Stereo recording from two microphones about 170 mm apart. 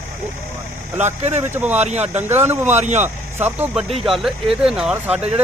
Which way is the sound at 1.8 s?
40° right (ahead or behind).